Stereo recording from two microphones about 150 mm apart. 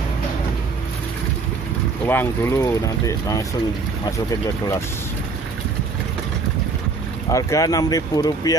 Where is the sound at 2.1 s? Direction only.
15° left (ahead or behind).